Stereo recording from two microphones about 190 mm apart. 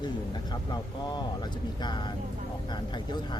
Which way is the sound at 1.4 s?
25° left (ahead or behind).